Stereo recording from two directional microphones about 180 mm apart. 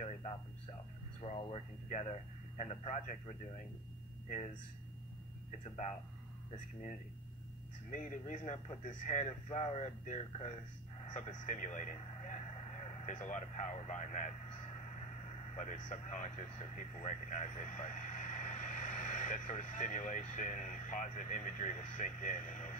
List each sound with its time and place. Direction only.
1.2 s speech: 35° left (ahead or behind)
5.6 s speech: 40° left (ahead or behind)
15.5 s speech: 45° left (ahead or behind)